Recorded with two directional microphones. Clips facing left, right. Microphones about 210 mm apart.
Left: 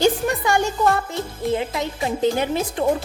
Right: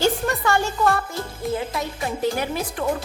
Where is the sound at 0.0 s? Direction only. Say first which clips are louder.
Left 2 dB; 15° left (ahead or behind).